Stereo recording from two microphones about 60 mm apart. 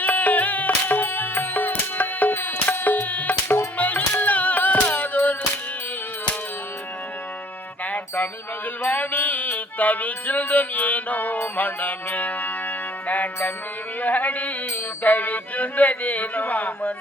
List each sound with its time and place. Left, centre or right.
0.0 s music: left
7.9 s music: left
14.0 s a sound: left
15.0 s music: left